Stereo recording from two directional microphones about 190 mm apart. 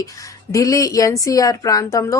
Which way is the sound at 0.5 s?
15° left (ahead or behind).